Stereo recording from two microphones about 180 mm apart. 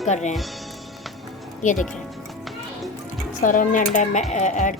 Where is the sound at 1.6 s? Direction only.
45° left (ahead or behind).